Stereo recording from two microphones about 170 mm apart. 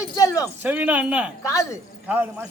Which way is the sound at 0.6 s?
10° right (ahead or behind).